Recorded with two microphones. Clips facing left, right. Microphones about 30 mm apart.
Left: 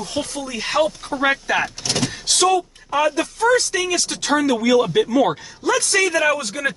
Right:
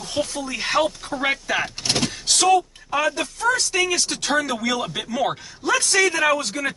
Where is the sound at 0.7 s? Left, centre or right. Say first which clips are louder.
Left 2 dB; centre.